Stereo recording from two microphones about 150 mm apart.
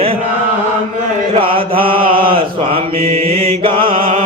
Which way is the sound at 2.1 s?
75° right (ahead or behind).